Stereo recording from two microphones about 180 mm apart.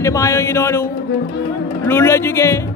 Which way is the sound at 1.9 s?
15° left (ahead or behind).